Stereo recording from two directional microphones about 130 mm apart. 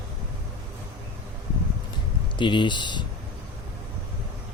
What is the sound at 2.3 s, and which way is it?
Speech, 35° left (ahead or behind).